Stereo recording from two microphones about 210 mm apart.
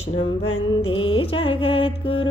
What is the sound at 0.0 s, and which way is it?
Music, 30° left (ahead or behind).